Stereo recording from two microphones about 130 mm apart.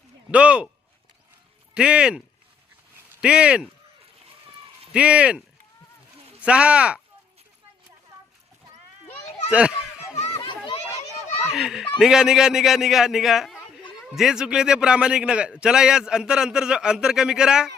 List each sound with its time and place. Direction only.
0.3 s speech: 10° right (ahead or behind)
1.7 s speech: 5° right (ahead or behind)
4.9 s speech: 10° right (ahead or behind)
6.4 s speech: 10° right (ahead or behind)
9.5 s speech: 10° right (ahead or behind)
10.2 s children playing: 45° left (ahead or behind)
11.5 s a man's voice: centre (ahead or behind)